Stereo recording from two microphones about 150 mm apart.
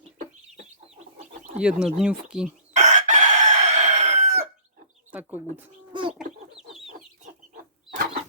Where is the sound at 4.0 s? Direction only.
45° right (ahead or behind).